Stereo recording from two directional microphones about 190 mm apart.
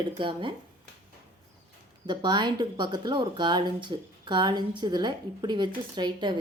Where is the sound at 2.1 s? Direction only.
25° right (ahead or behind).